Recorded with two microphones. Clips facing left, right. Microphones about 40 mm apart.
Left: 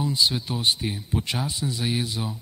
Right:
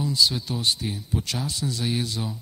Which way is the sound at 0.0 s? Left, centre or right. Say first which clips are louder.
Even; left.